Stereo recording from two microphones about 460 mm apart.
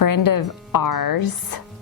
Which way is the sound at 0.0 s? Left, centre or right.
Left.